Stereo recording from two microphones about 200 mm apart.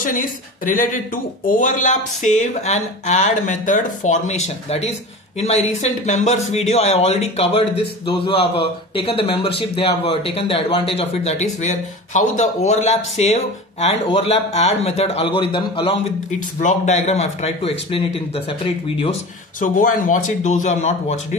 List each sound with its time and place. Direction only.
0.0 s a woman's voice: 45° left (ahead or behind)
19.6 s speech: 40° left (ahead or behind)